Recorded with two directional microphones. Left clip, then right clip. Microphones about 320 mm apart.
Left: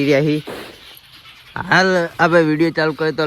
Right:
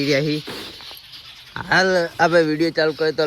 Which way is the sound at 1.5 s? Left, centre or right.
Left.